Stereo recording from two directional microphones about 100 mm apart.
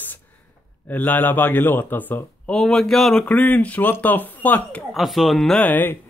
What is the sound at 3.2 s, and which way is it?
Speech, 15° left (ahead or behind).